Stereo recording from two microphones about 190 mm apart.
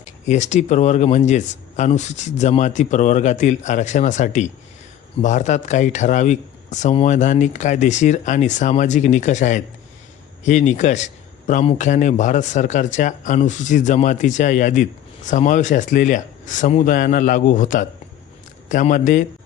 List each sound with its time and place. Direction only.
0.0 s a man's voice: 40° left (ahead or behind)